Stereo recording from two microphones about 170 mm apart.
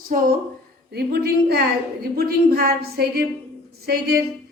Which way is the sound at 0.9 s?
70° right (ahead or behind).